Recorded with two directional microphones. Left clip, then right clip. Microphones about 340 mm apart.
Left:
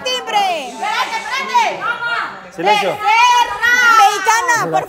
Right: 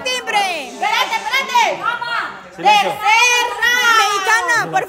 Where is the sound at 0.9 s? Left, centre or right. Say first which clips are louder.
Right 2 dB; right.